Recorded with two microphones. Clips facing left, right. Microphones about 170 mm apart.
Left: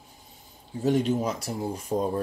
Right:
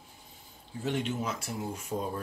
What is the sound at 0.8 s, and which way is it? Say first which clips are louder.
Speech: left 8 dB; 40° left (ahead or behind).